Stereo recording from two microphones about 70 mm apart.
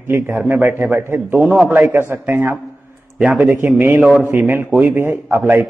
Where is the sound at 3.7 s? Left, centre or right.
Right.